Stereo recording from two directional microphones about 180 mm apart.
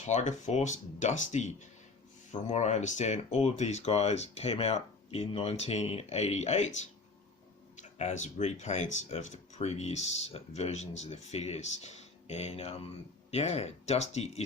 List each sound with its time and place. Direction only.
0.0 s speech: 40° left (ahead or behind)